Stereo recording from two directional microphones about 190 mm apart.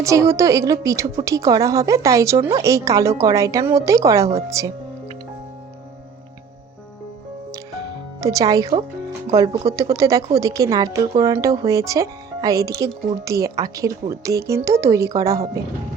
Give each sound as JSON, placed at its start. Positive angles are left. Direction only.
{"t": 0.0, "sound": "a woman's voice", "side_deg": -15}
{"t": 8.2, "sound": "a woman's voice", "side_deg": -20}